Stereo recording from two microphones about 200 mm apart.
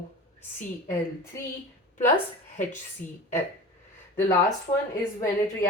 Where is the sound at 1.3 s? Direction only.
15° left (ahead or behind).